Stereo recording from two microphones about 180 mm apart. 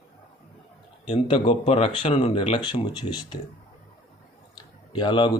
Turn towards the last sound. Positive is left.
turn(degrees=25)  # may be behind; listen again after turning